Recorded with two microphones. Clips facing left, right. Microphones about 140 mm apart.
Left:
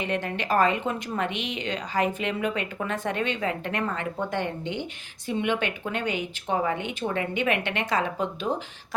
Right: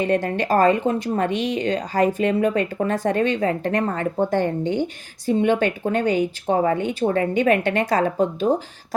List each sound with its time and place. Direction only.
0.0 s speech: 40° right (ahead or behind)